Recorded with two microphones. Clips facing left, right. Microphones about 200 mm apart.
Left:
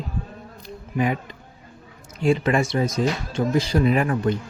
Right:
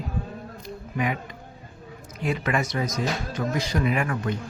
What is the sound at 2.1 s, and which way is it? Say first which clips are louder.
Speech: left 6 dB; 30° left (ahead or behind).